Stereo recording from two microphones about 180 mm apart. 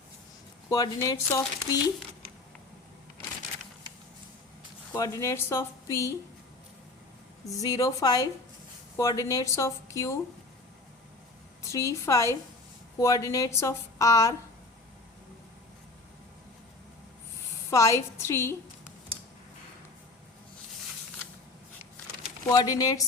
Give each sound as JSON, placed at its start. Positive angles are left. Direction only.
{"t": 0.7, "sound": "speech", "side_deg": 20}
{"t": 4.9, "sound": "a woman's voice", "side_deg": 20}
{"t": 7.4, "sound": "a woman's voice", "side_deg": 20}
{"t": 11.6, "sound": "a woman's voice", "side_deg": 15}
{"t": 17.7, "sound": "a woman's voice", "side_deg": 15}
{"t": 22.4, "sound": "speech", "side_deg": 20}